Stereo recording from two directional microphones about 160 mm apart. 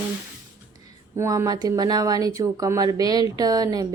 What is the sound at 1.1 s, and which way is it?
Speech, 15° right (ahead or behind).